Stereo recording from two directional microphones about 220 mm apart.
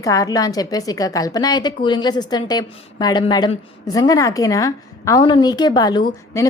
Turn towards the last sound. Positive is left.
turn(degrees=10)  # may be behind; listen again after turning